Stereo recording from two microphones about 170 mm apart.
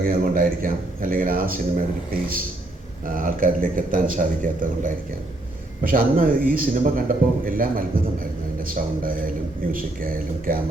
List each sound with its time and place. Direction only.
0.0 s a man's voice: 60° right (ahead or behind)
3.1 s a man's voice: 55° right (ahead or behind)